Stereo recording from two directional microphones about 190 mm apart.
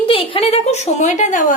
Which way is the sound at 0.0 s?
25° left (ahead or behind).